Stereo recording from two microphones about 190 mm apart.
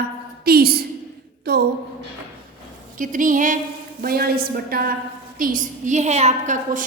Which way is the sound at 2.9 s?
45° right (ahead or behind).